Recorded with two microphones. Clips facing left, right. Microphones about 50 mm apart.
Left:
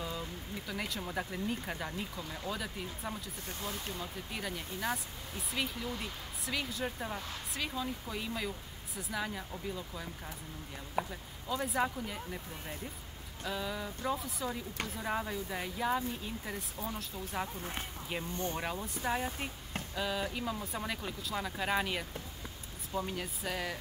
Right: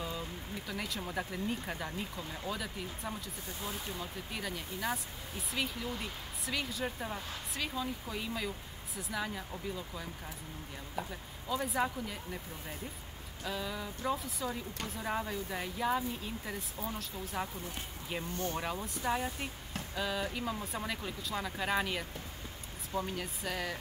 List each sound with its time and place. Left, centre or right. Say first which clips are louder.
0.0 s speech: even; centre
11.1 s speech: right 1 dB; centre
18.3 s speech: right 1 dB; left
18.6 s speech: even; centre
23.1 s speech: even; centre